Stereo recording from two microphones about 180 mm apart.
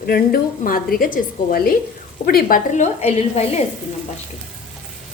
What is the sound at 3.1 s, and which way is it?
Speech, 35° left (ahead or behind).